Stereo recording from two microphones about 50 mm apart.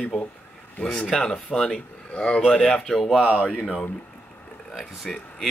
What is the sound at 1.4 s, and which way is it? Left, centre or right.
Speech, centre.